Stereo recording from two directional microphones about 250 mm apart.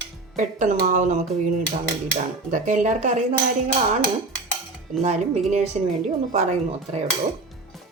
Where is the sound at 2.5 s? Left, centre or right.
Right.